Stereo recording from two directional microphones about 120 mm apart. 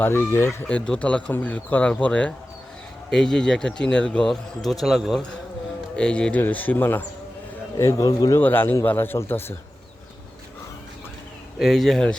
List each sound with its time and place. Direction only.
0.0 s a man's voice: 20° left (ahead or behind)
0.7 s speech: 10° left (ahead or behind)
6.0 s a man's voice: 10° left (ahead or behind); by 8.4 s 30° left (ahead or behind)
8.4 s a man's voice: 15° left (ahead or behind)
11.6 s speech: centre (ahead or behind)